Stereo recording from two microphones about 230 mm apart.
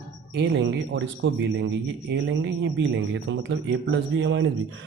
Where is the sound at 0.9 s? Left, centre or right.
Right.